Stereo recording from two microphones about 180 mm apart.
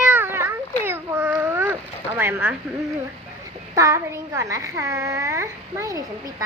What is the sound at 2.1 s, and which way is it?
Speech, 15° right (ahead or behind).